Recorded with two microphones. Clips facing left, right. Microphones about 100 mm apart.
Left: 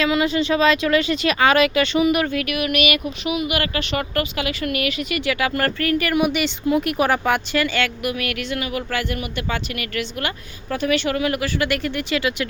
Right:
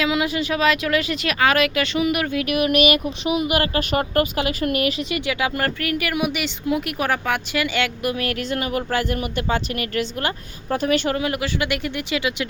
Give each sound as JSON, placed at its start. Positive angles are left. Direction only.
{"t": 0.0, "sound": "speech", "side_deg": -10}
{"t": 2.5, "sound": "a woman's voice", "side_deg": -35}
{"t": 7.5, "sound": "a woman's voice", "side_deg": -15}
{"t": 8.0, "sound": "speech", "side_deg": -30}
{"t": 11.1, "sound": "a woman's voice", "side_deg": -25}